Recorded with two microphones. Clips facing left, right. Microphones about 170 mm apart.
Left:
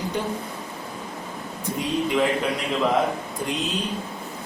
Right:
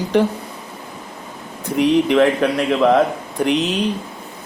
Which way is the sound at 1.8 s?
75° right (ahead or behind).